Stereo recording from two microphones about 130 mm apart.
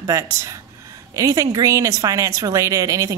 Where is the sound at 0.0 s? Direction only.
25° right (ahead or behind).